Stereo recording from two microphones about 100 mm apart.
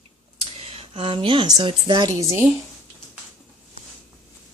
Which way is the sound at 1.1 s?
55° right (ahead or behind).